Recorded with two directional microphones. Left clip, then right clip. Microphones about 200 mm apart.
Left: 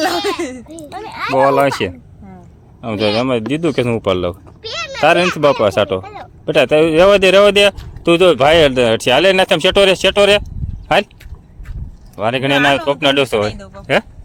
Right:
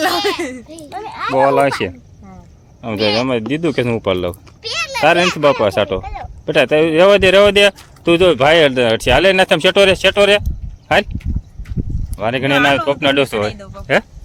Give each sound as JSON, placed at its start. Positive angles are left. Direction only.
{"t": 0.9, "sound": "speech", "side_deg": 5}
{"t": 4.6, "sound": "speech", "side_deg": -55}
{"t": 5.4, "sound": "speech", "side_deg": 5}